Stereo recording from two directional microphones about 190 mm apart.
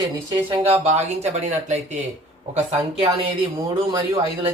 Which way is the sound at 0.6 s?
35° right (ahead or behind).